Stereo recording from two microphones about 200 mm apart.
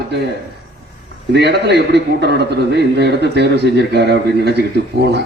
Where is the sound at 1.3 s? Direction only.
55° right (ahead or behind).